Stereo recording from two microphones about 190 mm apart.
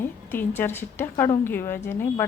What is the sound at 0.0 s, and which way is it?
A woman's voice, 10° left (ahead or behind).